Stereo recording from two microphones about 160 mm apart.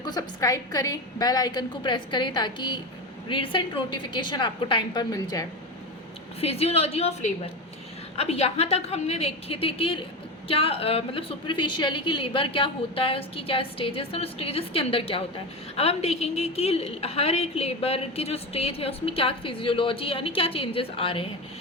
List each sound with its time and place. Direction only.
0.0 s a woman's voice: 25° left (ahead or behind)
6.4 s a woman's voice: 40° left (ahead or behind)